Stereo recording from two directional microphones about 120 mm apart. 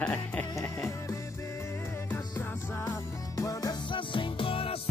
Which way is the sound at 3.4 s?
30° left (ahead or behind).